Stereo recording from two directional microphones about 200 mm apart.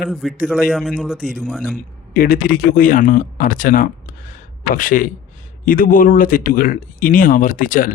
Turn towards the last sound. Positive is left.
turn(degrees=45)  # may be behind; listen again after turning